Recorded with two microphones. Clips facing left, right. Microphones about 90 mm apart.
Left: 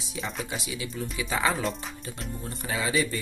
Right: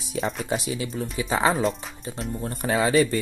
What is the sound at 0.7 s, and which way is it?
Speech, 35° right (ahead or behind).